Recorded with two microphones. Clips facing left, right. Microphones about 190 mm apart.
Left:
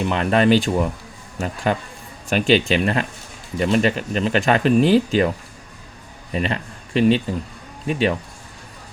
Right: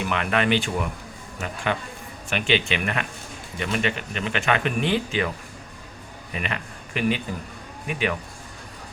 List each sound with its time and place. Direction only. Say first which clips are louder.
0.0 s speech: left 6 dB; 35° left (ahead or behind)
6.3 s a man's voice: left 7 dB; 30° left (ahead or behind)